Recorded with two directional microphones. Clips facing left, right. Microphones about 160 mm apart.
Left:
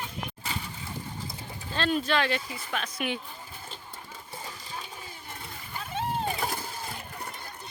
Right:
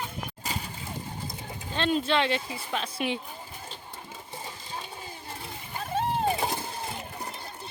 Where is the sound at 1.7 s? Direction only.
20° right (ahead or behind).